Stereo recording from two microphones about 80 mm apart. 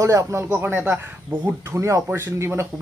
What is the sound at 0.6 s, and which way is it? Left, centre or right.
Speech, right.